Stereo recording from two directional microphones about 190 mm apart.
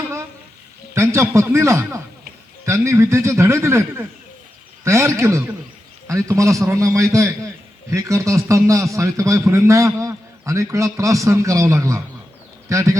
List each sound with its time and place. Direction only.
0.9 s a man's voice: 15° right (ahead or behind)